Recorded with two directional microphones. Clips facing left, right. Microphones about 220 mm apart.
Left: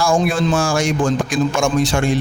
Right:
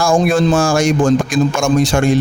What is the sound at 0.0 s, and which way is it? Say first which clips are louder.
Speech: right 4 dB; 45° right (ahead or behind).